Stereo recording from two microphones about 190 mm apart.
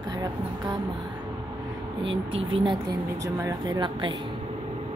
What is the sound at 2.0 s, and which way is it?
Speech, 80° right.